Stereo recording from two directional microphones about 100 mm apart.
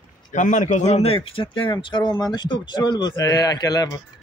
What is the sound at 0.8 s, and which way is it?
Speech, 90° left.